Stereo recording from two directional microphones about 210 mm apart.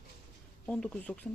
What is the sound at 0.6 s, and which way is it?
Speech, 5° left (ahead or behind).